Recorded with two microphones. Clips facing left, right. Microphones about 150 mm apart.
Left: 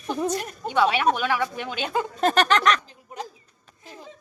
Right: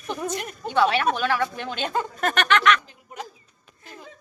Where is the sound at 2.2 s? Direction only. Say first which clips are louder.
Left 3 dB; 30° left (ahead or behind).